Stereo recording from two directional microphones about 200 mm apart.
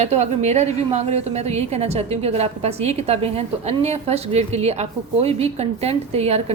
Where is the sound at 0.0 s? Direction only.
35° right (ahead or behind).